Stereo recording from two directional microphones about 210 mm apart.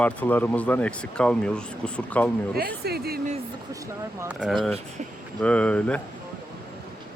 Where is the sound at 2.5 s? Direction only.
50° right (ahead or behind).